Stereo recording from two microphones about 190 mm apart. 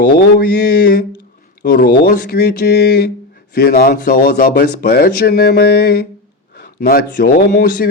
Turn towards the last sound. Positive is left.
turn(degrees=50)  # may be behind; listen again after turning